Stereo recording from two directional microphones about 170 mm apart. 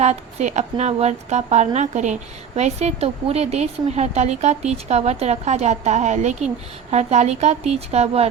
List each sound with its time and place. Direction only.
0.0 s speech: 40° right (ahead or behind)